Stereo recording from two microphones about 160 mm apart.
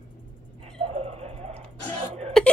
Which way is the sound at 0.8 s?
40° right (ahead or behind).